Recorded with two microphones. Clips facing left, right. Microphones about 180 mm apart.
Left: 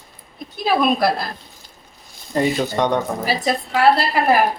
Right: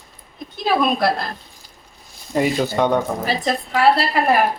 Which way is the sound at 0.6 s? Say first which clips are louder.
Left 1 dB; centre (ahead or behind).